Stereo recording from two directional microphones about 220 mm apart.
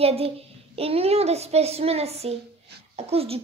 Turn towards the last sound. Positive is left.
turn(degrees=-25)  # may be behind; listen again after turning